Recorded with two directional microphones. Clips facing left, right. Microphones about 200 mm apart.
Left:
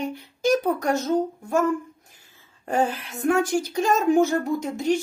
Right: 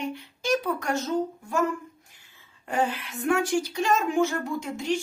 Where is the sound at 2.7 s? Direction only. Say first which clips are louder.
Left 3 dB; 40° left (ahead or behind).